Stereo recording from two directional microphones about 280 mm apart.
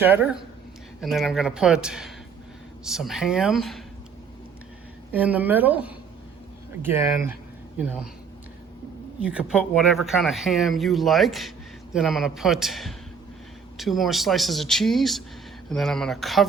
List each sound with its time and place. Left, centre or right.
0.0 s speech: centre
5.1 s speech: centre
9.2 s speech: centre